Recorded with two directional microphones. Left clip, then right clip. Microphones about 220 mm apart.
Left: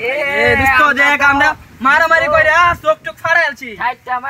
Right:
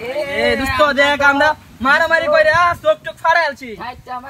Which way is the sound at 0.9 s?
15° right (ahead or behind).